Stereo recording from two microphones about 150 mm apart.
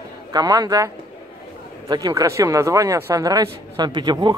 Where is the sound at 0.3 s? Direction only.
25° right (ahead or behind).